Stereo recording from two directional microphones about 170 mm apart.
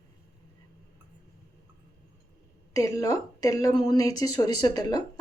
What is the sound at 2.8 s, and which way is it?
A woman's voice, 20° left (ahead or behind).